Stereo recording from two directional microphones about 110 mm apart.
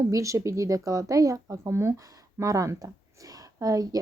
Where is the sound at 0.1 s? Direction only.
30° right (ahead or behind).